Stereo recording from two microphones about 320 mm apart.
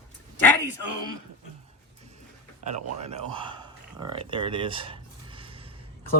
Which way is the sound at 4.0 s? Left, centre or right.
Centre.